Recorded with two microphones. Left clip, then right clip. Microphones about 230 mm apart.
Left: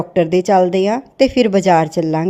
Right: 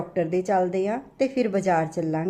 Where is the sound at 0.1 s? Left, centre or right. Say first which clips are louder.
Left 10 dB; left.